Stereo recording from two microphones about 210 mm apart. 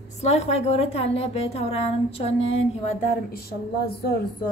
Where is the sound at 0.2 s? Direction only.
30° left (ahead or behind).